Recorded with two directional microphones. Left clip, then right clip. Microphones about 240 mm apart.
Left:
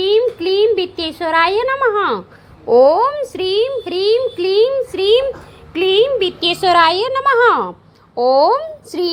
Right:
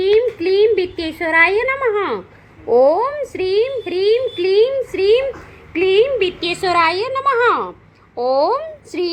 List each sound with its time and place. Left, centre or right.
0.0 s a sound: centre
0.5 s a woman's voice: centre
6.5 s a woman's voice: left